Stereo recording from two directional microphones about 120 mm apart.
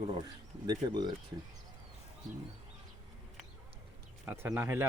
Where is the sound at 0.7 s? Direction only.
35° right (ahead or behind).